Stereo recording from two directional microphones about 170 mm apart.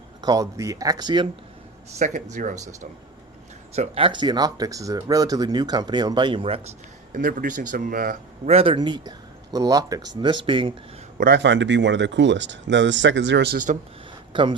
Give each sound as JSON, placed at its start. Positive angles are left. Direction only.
{"t": 0.2, "sound": "speech", "side_deg": -20}
{"t": 2.0, "sound": "speech", "side_deg": -45}
{"t": 3.8, "sound": "speech", "side_deg": -30}
{"t": 7.1, "sound": "speech", "side_deg": -50}
{"t": 8.4, "sound": "speech", "side_deg": -35}
{"t": 11.2, "sound": "speech", "side_deg": -80}
{"t": 14.3, "sound": "speech", "side_deg": -30}